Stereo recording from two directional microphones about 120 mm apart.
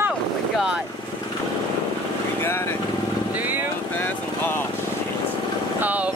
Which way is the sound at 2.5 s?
20° left (ahead or behind).